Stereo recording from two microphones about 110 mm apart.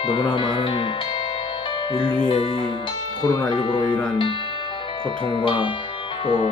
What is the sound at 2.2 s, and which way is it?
Speech, 45° left (ahead or behind).